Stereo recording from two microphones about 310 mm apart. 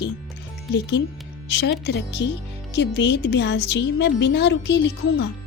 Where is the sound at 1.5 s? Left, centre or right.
Left.